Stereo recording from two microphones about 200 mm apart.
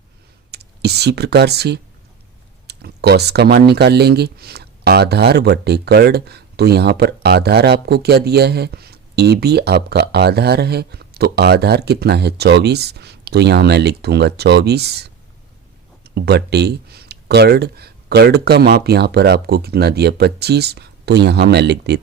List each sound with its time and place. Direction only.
0.5 s speech: 55° right (ahead or behind)